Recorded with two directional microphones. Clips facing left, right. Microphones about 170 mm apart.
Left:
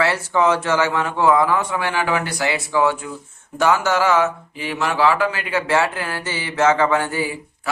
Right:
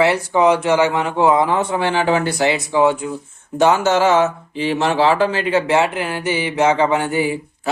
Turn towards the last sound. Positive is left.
turn(degrees=-20)  # may be behind; listen again after turning